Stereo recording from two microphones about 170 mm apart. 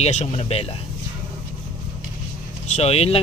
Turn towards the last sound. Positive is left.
turn(degrees=35)  # may be behind; listen again after turning